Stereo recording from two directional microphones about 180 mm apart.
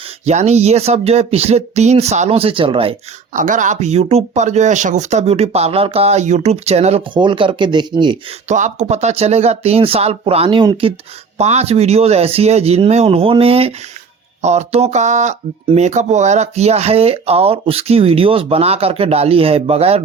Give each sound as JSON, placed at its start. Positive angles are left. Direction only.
{"t": 0.3, "sound": "speech", "side_deg": -35}
{"t": 3.3, "sound": "speech", "side_deg": -45}
{"t": 8.4, "sound": "speech", "side_deg": -40}